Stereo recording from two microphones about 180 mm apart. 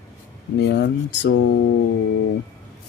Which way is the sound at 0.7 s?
75° left (ahead or behind).